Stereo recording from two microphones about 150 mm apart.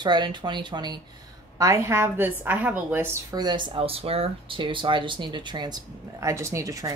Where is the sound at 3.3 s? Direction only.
25° right (ahead or behind).